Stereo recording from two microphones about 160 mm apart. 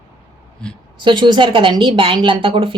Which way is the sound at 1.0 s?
30° right (ahead or behind).